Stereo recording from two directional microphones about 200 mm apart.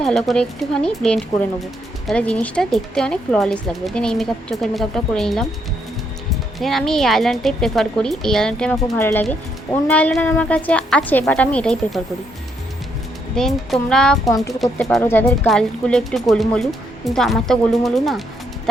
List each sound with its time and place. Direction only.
0.0 s speech: centre (ahead or behind)
6.6 s a woman's voice: centre (ahead or behind)
13.3 s speech: centre (ahead or behind)
14.3 s a woman's voice: 15° left (ahead or behind)
14.6 s speech: centre (ahead or behind)